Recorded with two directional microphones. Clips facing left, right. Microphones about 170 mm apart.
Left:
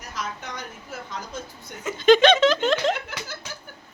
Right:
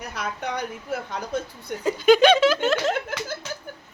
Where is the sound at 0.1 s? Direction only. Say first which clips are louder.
Right 3 dB; 60° right (ahead or behind).